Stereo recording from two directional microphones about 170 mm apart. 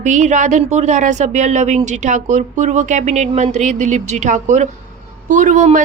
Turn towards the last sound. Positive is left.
turn(degrees=-45)  # may be behind; listen again after turning